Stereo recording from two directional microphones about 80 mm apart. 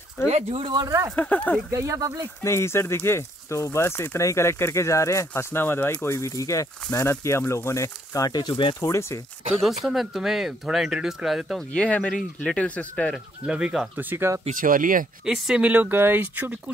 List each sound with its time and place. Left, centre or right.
0.2 s speech: left
0.8 s speech: right
1.1 s speech: centre
1.7 s speech: right
2.4 s speech: left
5.9 s speech: left
8.8 s speech: left
9.6 s speech: centre
11.7 s speech: centre
13.5 s speech: centre
13.9 s speech: right
15.2 s speech: centre
15.6 s speech: right